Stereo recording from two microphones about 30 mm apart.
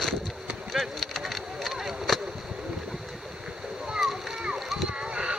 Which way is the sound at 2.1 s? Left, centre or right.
Centre.